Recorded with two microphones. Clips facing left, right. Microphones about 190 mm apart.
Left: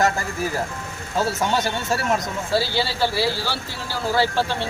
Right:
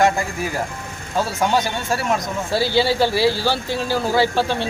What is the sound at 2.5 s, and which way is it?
Speech, 15° right (ahead or behind).